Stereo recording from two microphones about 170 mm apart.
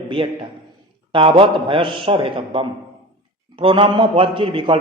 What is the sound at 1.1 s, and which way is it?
A man's voice, 30° right (ahead or behind).